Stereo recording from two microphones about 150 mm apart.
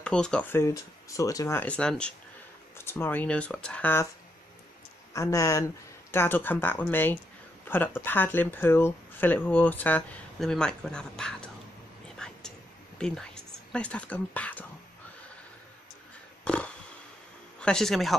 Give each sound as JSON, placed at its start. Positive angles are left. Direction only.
{"t": 0.0, "sound": "speech", "side_deg": 5}
{"t": 1.6, "sound": "speech", "side_deg": 5}
{"t": 5.1, "sound": "speech", "side_deg": 20}
{"t": 12.2, "sound": "whispering", "side_deg": 5}
{"t": 13.0, "sound": "speech", "side_deg": 5}
{"t": 16.4, "sound": "a sound", "side_deg": 5}
{"t": 17.6, "sound": "speech", "side_deg": 5}